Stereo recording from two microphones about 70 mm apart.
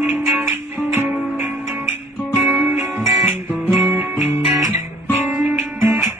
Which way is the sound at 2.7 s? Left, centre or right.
Right.